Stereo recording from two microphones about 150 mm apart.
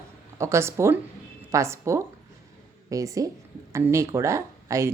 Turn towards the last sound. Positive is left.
turn(degrees=-20)  # may be behind; listen again after turning